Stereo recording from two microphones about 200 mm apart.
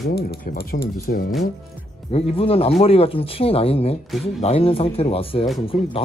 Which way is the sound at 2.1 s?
30° left (ahead or behind).